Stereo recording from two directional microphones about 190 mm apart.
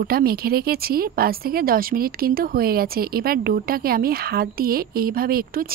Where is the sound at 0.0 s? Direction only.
50° right (ahead or behind).